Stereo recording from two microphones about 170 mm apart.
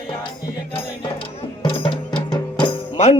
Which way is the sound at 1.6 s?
30° left (ahead or behind).